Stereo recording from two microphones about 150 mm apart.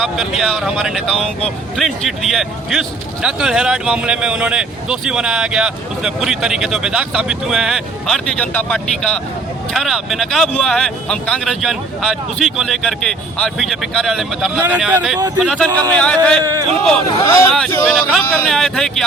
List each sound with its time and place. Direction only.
0.0 s speech: centre (ahead or behind)
14.6 s speech: 10° right (ahead or behind)
15.4 s speech: 5° left (ahead or behind)
16.4 s a man's voice: 25° right (ahead or behind)
17.2 s speech: 25° left (ahead or behind)
17.8 s speech: centre (ahead or behind)